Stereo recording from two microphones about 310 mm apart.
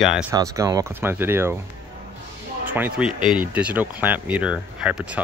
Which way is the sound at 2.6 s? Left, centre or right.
Centre.